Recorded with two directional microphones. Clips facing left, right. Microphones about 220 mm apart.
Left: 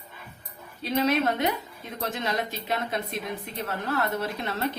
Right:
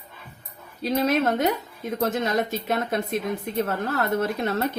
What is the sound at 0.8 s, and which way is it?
A woman's voice, 45° right (ahead or behind).